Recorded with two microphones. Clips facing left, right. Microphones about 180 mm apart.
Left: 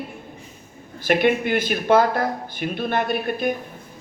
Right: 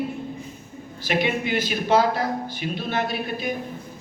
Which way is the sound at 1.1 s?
55° left (ahead or behind).